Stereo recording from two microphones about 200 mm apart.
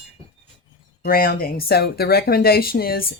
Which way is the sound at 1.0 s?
50° left (ahead or behind).